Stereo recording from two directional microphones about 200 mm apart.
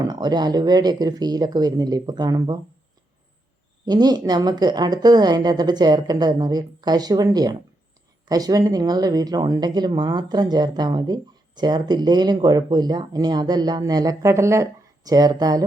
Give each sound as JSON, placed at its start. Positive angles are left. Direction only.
{"t": 0.0, "sound": "speech", "side_deg": -20}
{"t": 3.8, "sound": "speech", "side_deg": -20}